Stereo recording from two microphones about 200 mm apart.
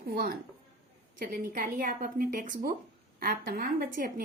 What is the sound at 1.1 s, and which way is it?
Speech, 45° right (ahead or behind).